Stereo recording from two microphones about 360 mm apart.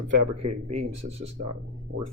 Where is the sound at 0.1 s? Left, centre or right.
Right.